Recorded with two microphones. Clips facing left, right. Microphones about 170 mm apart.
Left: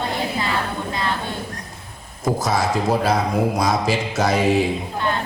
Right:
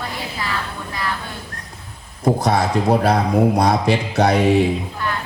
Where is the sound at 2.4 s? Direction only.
60° right (ahead or behind).